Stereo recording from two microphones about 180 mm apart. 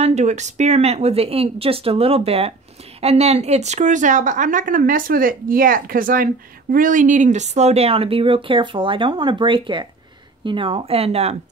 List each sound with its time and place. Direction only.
0.0 s a woman's voice: 40° right (ahead or behind)